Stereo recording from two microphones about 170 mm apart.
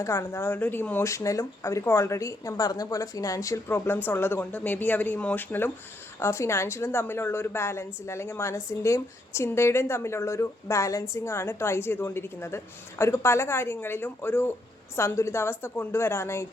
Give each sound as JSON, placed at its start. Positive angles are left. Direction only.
{"t": 0.0, "sound": "speech", "side_deg": 15}